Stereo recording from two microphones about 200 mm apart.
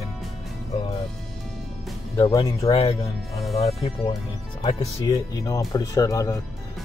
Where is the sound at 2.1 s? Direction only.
20° left (ahead or behind).